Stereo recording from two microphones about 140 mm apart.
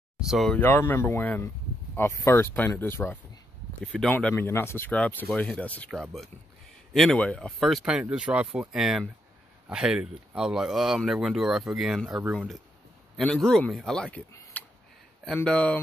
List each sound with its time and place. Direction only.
0.3 s speech: centre (ahead or behind)
0.6 s speech: 15° left (ahead or behind)
3.8 s speech: centre (ahead or behind)